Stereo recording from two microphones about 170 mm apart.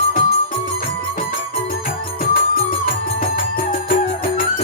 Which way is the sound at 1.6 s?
55° left (ahead or behind).